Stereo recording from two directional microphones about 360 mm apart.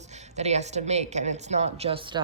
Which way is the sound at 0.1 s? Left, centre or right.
Centre.